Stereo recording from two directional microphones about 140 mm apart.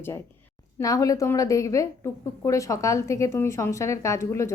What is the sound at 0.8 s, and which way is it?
A woman's voice, 25° left (ahead or behind).